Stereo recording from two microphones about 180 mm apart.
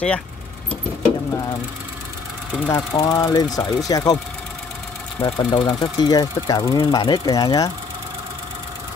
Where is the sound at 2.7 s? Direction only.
20° left (ahead or behind).